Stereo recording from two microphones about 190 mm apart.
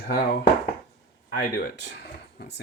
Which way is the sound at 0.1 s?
55° left (ahead or behind).